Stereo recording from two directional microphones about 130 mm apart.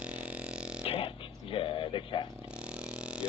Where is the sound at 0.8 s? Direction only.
45° left (ahead or behind).